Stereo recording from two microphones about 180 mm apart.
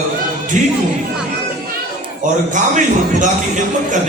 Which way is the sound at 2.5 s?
45° right (ahead or behind).